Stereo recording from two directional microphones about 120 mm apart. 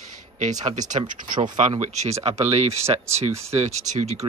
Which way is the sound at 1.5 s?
85° right.